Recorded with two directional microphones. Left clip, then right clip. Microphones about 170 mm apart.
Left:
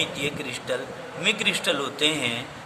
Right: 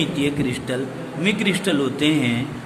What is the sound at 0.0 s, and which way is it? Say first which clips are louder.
A man's voice: right 5 dB; 15° left (ahead or behind).